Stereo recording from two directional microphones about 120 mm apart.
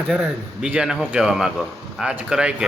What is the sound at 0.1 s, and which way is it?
A man's voice, 10° right (ahead or behind).